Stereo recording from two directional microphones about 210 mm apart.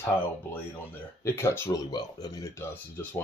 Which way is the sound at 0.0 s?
10° left (ahead or behind).